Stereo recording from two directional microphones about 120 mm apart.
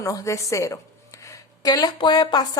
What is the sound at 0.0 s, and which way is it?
A woman's voice, 25° left (ahead or behind).